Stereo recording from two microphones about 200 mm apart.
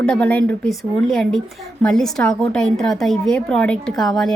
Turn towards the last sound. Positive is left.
turn(degrees=0)  # may be behind; listen again after turning